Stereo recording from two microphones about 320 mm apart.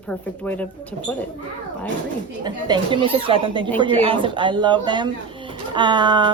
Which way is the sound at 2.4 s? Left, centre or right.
Centre.